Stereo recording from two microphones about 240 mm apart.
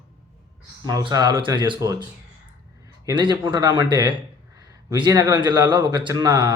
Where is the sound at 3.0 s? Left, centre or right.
Centre.